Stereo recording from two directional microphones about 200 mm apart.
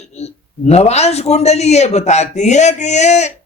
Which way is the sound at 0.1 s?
35° left (ahead or behind).